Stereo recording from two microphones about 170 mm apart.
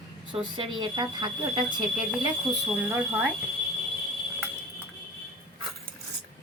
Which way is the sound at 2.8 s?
10° right (ahead or behind).